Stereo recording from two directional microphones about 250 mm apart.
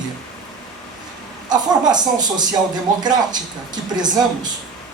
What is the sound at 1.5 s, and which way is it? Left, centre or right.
Speech, centre.